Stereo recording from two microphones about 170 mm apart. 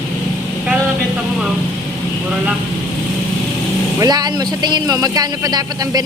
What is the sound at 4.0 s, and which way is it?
A man's voice, 25° right (ahead or behind).